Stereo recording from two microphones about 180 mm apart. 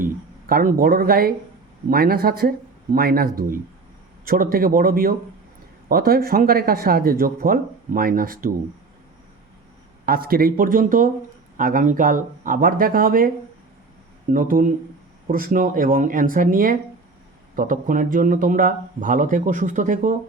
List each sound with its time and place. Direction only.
0.0 s speech: 50° right (ahead or behind)
10.1 s speech: 55° right (ahead or behind)